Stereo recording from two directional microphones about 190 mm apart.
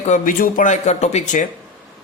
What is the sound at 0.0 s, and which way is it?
A man's voice, 40° left (ahead or behind).